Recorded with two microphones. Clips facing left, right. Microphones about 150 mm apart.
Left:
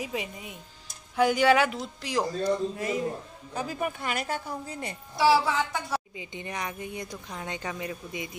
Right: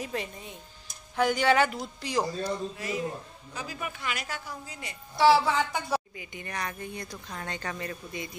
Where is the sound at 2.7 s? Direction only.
50° left (ahead or behind).